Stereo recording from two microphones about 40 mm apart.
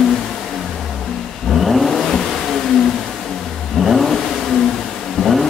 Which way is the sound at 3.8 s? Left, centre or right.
Centre.